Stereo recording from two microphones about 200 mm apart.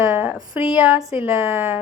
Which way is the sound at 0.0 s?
10° right (ahead or behind).